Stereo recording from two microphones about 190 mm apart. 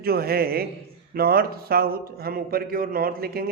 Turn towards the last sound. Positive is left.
turn(degrees=-50)  # may be behind; listen again after turning